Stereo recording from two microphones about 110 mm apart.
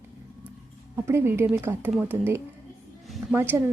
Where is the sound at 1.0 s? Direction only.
20° right (ahead or behind).